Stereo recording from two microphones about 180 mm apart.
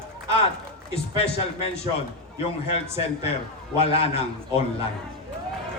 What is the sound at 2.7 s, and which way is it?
Speech, 35° left (ahead or behind).